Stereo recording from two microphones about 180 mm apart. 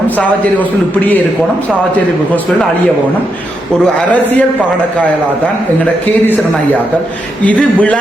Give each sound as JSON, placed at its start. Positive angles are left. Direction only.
{"t": 4.1, "sound": "a man's voice", "side_deg": 10}
{"t": 7.4, "sound": "a man's voice", "side_deg": 10}